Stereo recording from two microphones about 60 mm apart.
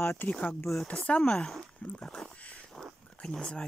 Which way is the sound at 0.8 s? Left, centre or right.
Left.